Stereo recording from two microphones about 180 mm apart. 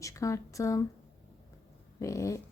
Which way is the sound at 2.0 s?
15° left (ahead or behind).